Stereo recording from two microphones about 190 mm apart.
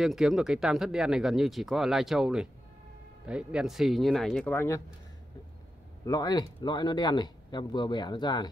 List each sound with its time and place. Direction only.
0.0 s speech: centre (ahead or behind); by 4.8 s 15° left (ahead or behind)
6.0 s speech: 20° left (ahead or behind)